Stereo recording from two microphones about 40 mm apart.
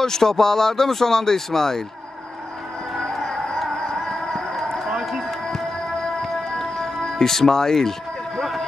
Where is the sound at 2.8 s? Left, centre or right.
Centre.